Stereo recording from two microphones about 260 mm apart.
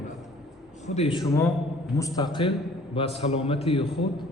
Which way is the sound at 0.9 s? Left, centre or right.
Left.